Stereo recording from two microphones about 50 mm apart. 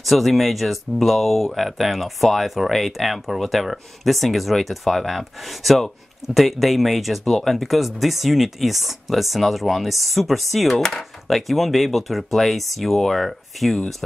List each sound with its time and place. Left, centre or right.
0.0 s speech: centre